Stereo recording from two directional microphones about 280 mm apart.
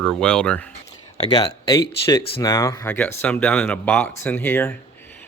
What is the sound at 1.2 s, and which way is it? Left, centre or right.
Speech, centre.